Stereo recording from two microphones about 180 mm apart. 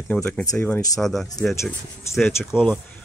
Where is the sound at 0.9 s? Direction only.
Centre (ahead or behind).